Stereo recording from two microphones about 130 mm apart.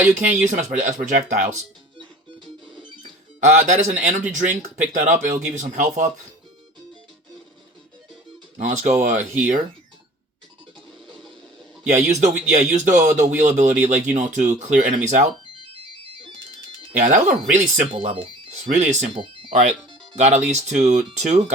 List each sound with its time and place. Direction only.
0.1 s speech: 70° right (ahead or behind)
3.4 s speech: 65° right (ahead or behind)
8.5 s speech: 70° right (ahead or behind); by 9.6 s 90° right
11.9 s speech: 65° right (ahead or behind)
17.0 s speech: 75° right (ahead or behind)
17.9 s speech: 45° right (ahead or behind)
18.5 s speech: 65° right (ahead or behind)
19.1 s music: 40° right (ahead or behind)
20.1 s speech: 60° right (ahead or behind)